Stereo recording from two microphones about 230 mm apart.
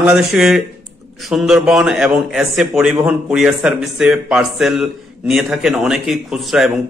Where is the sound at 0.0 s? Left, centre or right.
Centre.